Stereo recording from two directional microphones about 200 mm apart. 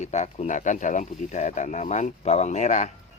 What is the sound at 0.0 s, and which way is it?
Speech, 35° left (ahead or behind).